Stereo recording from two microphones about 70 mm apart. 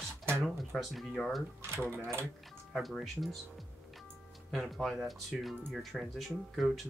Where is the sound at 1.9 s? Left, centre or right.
Right.